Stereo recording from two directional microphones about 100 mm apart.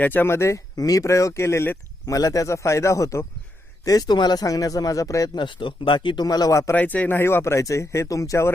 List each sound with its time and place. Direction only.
0.0 s speech: 20° left (ahead or behind)
2.0 s speech: 35° left (ahead or behind)
5.3 s speech: 55° left (ahead or behind); by 6.7 s 30° left (ahead or behind)
6.7 s speech: 15° left (ahead or behind)